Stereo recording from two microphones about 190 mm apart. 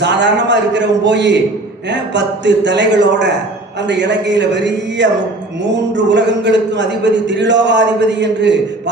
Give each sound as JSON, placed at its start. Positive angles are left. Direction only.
{"t": 0.0, "sound": "speech", "side_deg": -65}
{"t": 6.1, "sound": "speech", "side_deg": -65}